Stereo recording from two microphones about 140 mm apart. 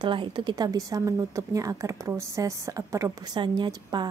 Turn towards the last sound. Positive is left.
turn(degrees=-25)  # may be behind; listen again after turning